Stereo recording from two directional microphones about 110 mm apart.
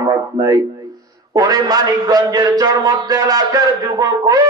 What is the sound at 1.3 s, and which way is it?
A man's voice, 35° right (ahead or behind).